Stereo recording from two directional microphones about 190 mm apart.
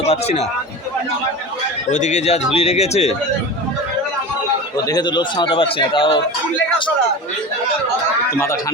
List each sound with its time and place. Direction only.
0.1 s speech: 35° left (ahead or behind)
1.9 s speech: 40° left (ahead or behind)
4.8 s a man's voice: 20° left (ahead or behind)